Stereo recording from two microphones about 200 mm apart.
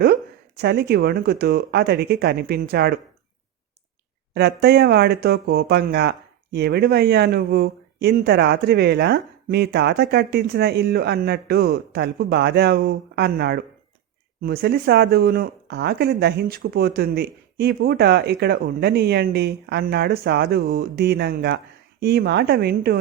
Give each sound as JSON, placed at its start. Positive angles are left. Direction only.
{"t": 0.0, "sound": "speech", "side_deg": -50}
{"t": 4.4, "sound": "speech", "side_deg": -50}